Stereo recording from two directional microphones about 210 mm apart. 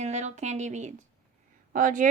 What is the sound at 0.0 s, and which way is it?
Speech, 35° right (ahead or behind).